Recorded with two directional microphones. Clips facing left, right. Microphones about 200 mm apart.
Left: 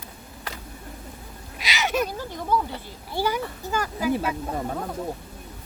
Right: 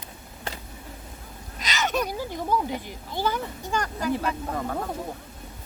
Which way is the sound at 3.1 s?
10° left (ahead or behind).